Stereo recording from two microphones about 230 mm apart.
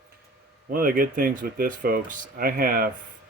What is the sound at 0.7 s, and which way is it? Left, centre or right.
Speech, right.